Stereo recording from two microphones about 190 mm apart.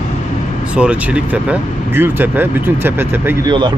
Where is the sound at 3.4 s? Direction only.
25° right (ahead or behind).